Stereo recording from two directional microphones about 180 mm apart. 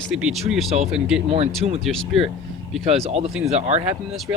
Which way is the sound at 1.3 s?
35° right (ahead or behind).